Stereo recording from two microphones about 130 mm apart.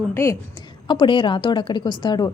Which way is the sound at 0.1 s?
20° left (ahead or behind).